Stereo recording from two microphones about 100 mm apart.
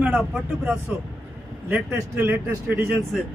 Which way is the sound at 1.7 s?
25° right (ahead or behind).